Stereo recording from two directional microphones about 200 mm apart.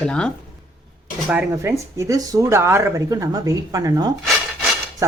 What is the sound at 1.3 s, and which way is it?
Speech, 10° right (ahead or behind).